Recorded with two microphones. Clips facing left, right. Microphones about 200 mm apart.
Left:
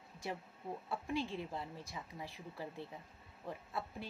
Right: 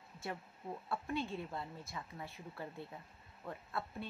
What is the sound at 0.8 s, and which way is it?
Speech, 15° left (ahead or behind).